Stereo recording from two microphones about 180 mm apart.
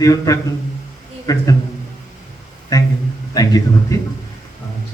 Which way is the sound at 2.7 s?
20° left (ahead or behind).